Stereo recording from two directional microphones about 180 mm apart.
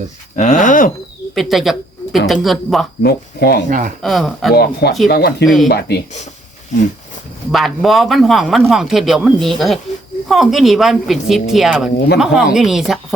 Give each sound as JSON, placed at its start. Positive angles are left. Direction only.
{"t": 0.3, "sound": "speech", "side_deg": 45}
{"t": 1.4, "sound": "speech", "side_deg": 0}
{"t": 3.0, "sound": "speech", "side_deg": 60}
{"t": 3.7, "sound": "speech", "side_deg": -45}
{"t": 4.0, "sound": "speech", "side_deg": 0}
{"t": 4.5, "sound": "speech", "side_deg": 65}
{"t": 7.5, "sound": "speech", "side_deg": 0}